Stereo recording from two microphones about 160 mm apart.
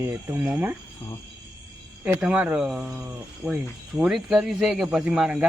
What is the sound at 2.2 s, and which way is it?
A man's voice, 5° right (ahead or behind).